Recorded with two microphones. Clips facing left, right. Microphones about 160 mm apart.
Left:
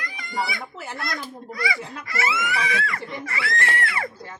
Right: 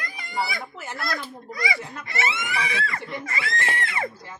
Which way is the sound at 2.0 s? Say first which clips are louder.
Left 3 dB; 25° right (ahead or behind).